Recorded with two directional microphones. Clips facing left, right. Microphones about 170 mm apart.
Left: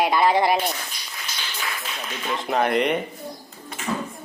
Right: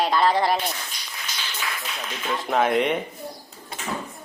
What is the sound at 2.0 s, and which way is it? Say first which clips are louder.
Speech: even; 5° left (ahead or behind).